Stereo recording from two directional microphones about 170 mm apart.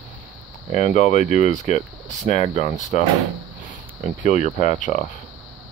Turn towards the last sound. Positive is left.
turn(degrees=45)  # may be behind; listen again after turning